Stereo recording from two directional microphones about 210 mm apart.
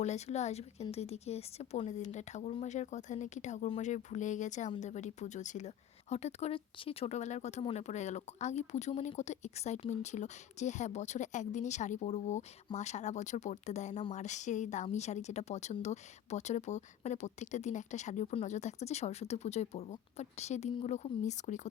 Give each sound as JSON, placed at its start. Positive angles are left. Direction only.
{"t": 0.0, "sound": "speech", "side_deg": 30}